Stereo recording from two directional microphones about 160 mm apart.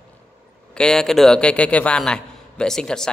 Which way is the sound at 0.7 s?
5° left (ahead or behind).